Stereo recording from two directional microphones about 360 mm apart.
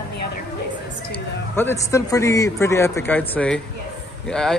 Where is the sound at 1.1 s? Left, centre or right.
Centre.